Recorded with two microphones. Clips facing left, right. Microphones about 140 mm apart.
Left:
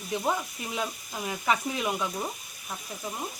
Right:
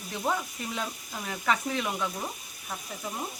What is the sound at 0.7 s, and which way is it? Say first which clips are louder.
Frying: left 5 dB; 10° left (ahead or behind).